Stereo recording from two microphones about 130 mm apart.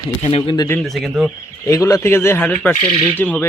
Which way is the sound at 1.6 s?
25° left (ahead or behind).